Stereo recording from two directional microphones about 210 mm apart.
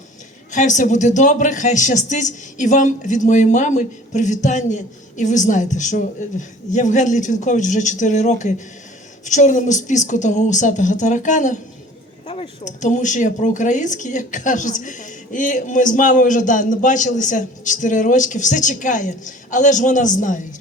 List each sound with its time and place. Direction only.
0.5 s speech: 35° left (ahead or behind)